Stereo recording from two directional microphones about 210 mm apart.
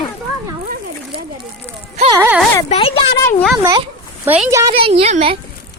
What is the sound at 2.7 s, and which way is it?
Speech, 25° left (ahead or behind).